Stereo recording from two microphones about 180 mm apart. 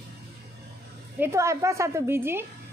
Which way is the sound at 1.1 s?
15° right (ahead or behind).